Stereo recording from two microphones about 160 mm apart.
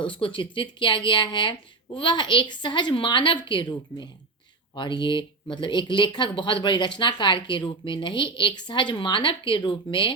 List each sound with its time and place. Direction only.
0.0 s speech: 30° left (ahead or behind)